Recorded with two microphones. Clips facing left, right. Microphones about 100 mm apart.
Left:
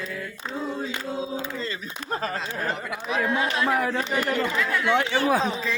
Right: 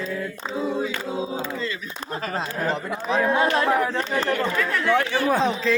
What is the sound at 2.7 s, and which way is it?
Speech, 35° right (ahead or behind).